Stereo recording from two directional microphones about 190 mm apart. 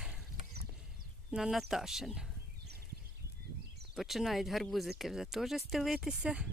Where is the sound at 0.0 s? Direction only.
5° right (ahead or behind).